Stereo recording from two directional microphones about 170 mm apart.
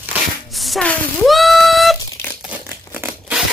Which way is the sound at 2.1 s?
15° left (ahead or behind).